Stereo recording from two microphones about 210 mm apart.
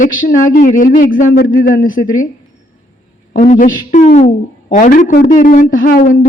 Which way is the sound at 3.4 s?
40° left (ahead or behind).